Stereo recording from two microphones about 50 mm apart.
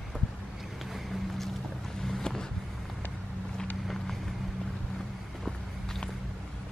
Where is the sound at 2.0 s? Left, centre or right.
Centre.